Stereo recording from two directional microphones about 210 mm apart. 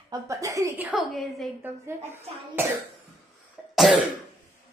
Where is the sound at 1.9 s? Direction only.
10° right (ahead or behind).